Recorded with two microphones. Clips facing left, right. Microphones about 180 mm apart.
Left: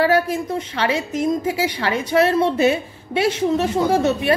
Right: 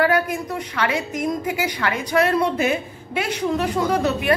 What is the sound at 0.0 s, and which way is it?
A woman's voice, 30° left (ahead or behind).